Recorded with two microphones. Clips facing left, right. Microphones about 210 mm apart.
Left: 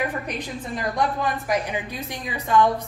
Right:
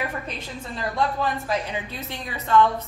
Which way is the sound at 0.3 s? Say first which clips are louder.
Left 4 dB; 15° left (ahead or behind).